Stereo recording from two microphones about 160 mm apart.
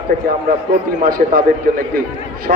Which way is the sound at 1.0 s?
65° right (ahead or behind).